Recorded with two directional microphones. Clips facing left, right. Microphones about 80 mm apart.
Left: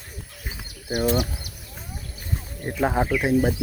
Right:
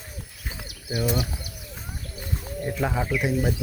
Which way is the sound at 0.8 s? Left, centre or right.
Left.